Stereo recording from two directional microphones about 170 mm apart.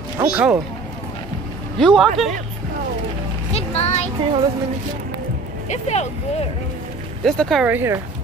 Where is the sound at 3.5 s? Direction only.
35° left (ahead or behind).